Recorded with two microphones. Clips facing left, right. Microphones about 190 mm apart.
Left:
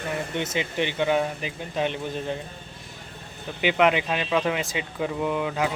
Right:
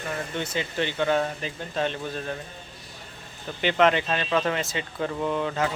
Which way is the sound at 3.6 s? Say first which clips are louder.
Even; 10° left (ahead or behind).